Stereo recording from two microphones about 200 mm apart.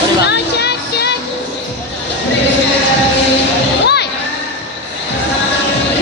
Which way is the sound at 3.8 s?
55° left (ahead or behind).